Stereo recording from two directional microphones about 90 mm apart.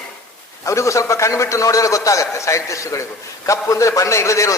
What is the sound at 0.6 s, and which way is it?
Speech, 35° left (ahead or behind).